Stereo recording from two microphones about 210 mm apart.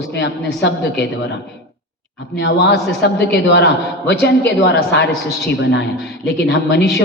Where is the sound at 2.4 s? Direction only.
50° left (ahead or behind).